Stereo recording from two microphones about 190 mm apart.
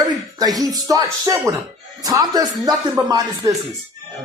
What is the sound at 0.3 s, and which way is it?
Speech, 20° right (ahead or behind).